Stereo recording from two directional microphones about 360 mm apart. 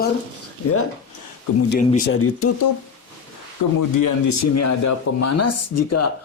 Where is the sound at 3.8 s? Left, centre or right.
Left.